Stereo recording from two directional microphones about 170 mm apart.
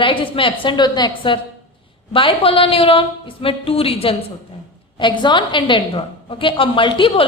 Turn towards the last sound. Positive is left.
turn(degrees=30)  # may be behind; listen again after turning